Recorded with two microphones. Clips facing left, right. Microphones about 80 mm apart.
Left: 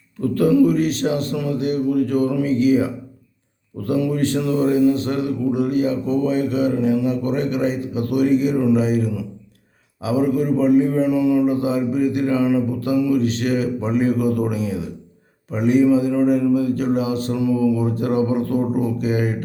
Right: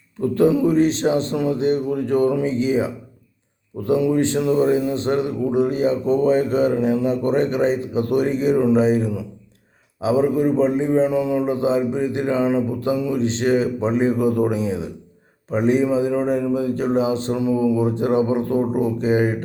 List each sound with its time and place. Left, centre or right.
0.2 s speech: right